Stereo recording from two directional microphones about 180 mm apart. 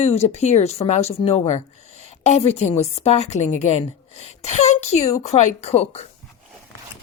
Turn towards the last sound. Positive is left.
turn(degrees=35)  # may be behind; listen again after turning